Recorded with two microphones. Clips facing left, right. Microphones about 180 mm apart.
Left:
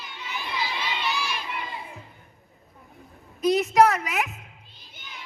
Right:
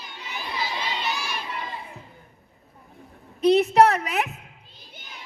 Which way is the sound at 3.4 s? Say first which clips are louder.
Right 2 dB; 30° right (ahead or behind).